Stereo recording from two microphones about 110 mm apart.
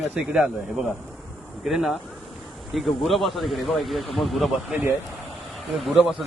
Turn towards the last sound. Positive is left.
turn(degrees=0)  # may be behind; listen again after turning